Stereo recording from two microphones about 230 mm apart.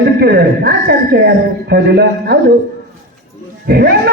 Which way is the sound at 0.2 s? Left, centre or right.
Right.